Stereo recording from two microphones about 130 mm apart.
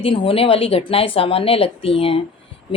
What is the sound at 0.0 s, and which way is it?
Speech, 45° left (ahead or behind).